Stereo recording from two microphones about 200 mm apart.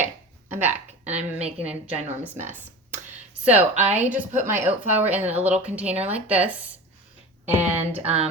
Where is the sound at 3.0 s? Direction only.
35° right (ahead or behind).